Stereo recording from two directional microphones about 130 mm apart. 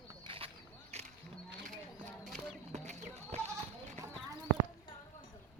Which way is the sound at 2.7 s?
60° right (ahead or behind).